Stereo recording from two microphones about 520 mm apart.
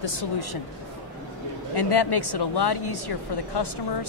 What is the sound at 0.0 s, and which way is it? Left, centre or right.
Speech, left.